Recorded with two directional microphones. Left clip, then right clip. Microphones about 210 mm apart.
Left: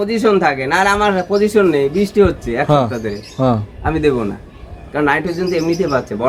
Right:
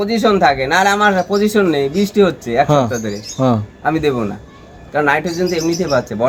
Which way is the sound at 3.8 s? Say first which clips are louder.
Left 1 dB; 25° right (ahead or behind).